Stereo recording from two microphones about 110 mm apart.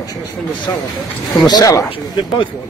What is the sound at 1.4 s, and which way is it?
Speech, 35° left (ahead or behind).